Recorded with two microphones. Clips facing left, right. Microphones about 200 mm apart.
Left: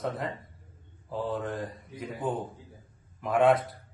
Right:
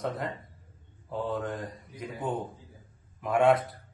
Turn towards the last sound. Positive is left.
turn(degrees=0)  # may be behind; listen again after turning